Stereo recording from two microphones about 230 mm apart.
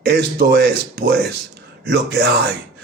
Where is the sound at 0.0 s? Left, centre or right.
Right.